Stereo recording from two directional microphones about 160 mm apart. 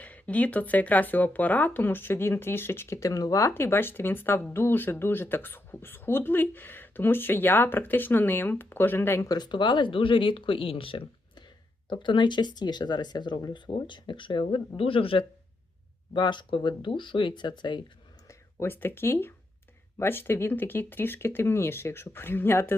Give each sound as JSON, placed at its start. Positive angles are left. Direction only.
{"t": 0.0, "sound": "speech", "side_deg": 10}
{"t": 18.3, "sound": "speech", "side_deg": 15}